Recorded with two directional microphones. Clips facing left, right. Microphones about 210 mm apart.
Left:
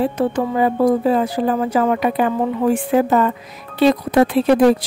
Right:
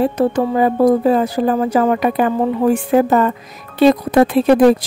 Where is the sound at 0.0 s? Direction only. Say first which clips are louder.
Right 3 dB; 45° right (ahead or behind).